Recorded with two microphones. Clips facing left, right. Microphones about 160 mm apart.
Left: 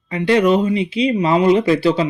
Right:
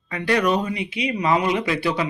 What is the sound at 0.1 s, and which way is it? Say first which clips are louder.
Speech: left 6 dB; 25° left (ahead or behind).